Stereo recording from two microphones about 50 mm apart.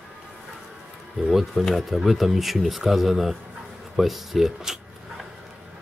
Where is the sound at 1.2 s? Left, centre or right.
Centre.